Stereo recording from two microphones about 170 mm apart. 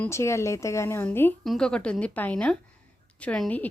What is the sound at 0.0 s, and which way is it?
A woman's voice, 15° left (ahead or behind).